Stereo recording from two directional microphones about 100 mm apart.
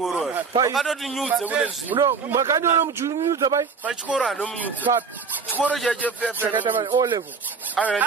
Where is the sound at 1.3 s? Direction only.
15° right (ahead or behind).